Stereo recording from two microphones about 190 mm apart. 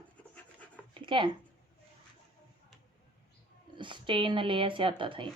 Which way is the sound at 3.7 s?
25° right (ahead or behind).